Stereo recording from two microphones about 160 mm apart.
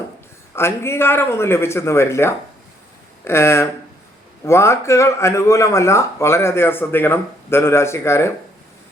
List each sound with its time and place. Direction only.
0.5 s speech: 15° left (ahead or behind)